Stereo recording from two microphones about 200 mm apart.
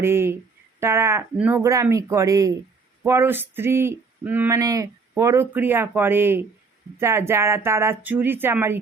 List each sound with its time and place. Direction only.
0.0 s speech: 10° right (ahead or behind)